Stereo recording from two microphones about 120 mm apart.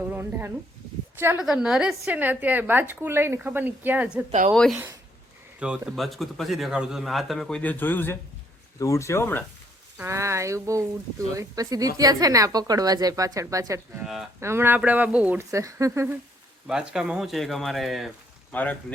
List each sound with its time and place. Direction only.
0.1 s a woman's voice: 15° right (ahead or behind)
1.4 s a woman's voice: 5° right (ahead or behind)
4.3 s a woman's voice: 65° right (ahead or behind)
4.5 s speech: 5° left (ahead or behind)
5.5 s speech: 10° right (ahead or behind); by 9.4 s 20° left (ahead or behind)
10.0 s speech: 25° right (ahead or behind)
14.0 s speech: 5° right (ahead or behind)
14.4 s a woman's voice: 20° right (ahead or behind)
15.4 s speech: 25° right (ahead or behind)
16.6 s speech: 5° right (ahead or behind)
18.5 s speech: 10° left (ahead or behind)